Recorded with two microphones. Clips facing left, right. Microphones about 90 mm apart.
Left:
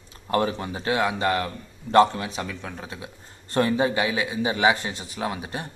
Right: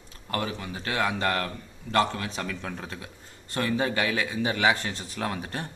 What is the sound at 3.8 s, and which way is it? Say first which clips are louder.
A man's voice: left 3 dB; 15° left (ahead or behind).